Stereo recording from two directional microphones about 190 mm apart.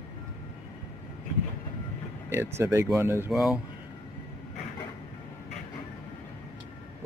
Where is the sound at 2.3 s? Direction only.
15° right (ahead or behind).